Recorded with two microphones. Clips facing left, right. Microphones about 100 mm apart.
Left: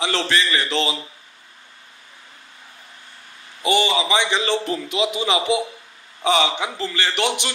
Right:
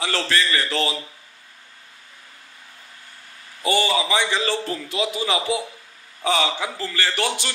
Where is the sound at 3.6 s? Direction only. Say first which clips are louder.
Left 2 dB; 20° left (ahead or behind).